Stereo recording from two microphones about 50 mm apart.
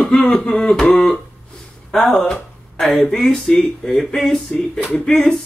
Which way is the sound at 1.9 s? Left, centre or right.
Centre.